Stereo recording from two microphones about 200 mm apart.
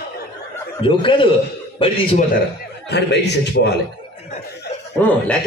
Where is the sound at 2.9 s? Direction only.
55° left (ahead or behind).